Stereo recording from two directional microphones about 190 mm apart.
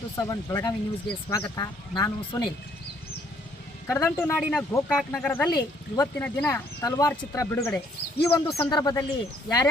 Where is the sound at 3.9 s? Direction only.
10° left (ahead or behind).